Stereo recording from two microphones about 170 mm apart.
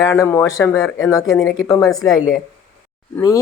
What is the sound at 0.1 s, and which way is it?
Speech, 15° left (ahead or behind).